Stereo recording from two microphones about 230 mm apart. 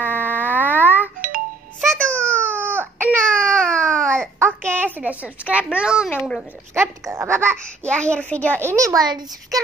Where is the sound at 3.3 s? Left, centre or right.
Centre.